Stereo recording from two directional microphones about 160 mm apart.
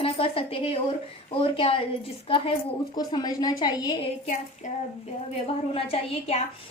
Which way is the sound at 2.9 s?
25° left (ahead or behind).